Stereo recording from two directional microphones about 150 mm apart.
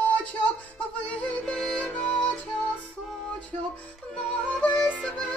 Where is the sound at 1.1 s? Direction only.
5° left (ahead or behind).